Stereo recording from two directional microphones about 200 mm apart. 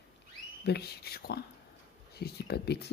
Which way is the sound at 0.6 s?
55° left (ahead or behind).